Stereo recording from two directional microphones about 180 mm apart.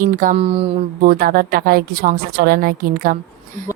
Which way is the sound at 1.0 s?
50° right (ahead or behind).